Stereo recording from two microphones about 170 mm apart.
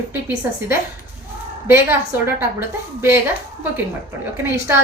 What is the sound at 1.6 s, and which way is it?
A woman's voice, 15° right (ahead or behind).